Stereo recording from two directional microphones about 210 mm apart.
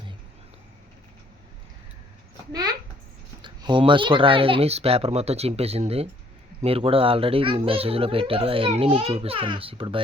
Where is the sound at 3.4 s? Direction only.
20° right (ahead or behind).